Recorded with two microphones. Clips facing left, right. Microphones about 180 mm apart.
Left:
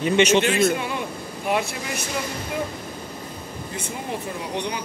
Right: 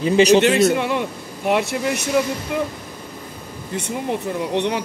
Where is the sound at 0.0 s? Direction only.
35° right (ahead or behind).